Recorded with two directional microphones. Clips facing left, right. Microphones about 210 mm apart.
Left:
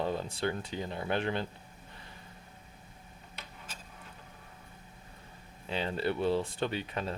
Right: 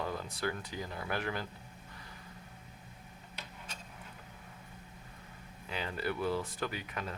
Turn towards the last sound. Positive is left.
turn(degrees=30)  # may be behind; listen again after turning